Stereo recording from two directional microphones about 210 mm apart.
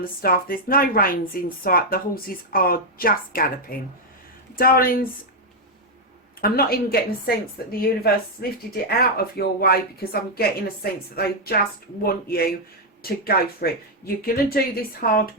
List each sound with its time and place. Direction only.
0.2 s a woman's voice: 45° left (ahead or behind)
6.4 s a woman's voice: 45° left (ahead or behind)